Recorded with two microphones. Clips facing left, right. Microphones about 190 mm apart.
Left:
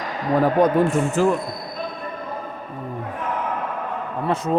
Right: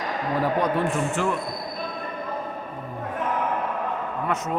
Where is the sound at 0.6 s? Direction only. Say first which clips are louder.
Left 6 dB; 40° left (ahead or behind).